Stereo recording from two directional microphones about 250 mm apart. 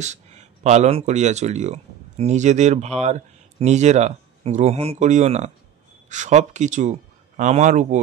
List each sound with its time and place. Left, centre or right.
0.0 s speech: right